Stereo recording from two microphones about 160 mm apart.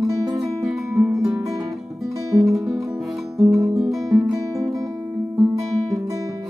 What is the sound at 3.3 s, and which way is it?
Music, centre (ahead or behind).